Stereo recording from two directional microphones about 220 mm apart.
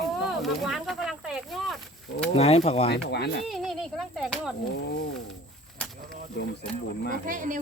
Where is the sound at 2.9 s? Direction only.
50° left (ahead or behind).